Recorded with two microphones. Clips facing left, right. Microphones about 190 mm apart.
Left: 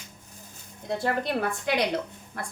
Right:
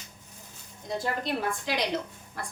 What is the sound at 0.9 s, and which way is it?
A woman's voice, 60° left (ahead or behind).